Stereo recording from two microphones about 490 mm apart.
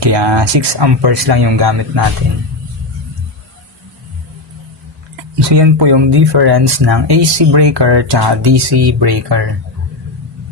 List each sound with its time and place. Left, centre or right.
0.0 s speech: right
5.5 s speech: right